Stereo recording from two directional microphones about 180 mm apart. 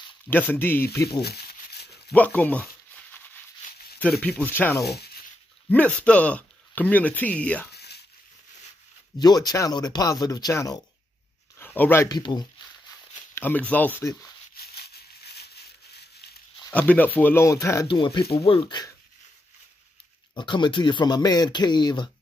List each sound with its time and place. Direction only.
0.3 s speech: 10° left (ahead or behind)
1.2 s crumpling: 65° left (ahead or behind)
2.0 s a sound: 10° left (ahead or behind)
4.0 s speech: 5° left (ahead or behind)
4.8 s speech: 65° left (ahead or behind)
5.7 s speech: 10° left (ahead or behind)
7.7 s a sound: 65° left (ahead or behind)
9.2 s speech: 20° left (ahead or behind)
12.2 s speech: 25° left (ahead or behind)
13.3 s speech: 10° left (ahead or behind)
14.6 s a sound: 60° left (ahead or behind)
16.7 s speech: 10° left (ahead or behind); by 18.9 s 25° left (ahead or behind)
20.3 s speech: 25° left (ahead or behind)